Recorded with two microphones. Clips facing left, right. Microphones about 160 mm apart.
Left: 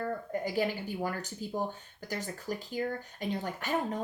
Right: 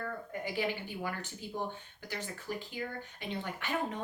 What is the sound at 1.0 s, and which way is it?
Speech, 40° left (ahead or behind).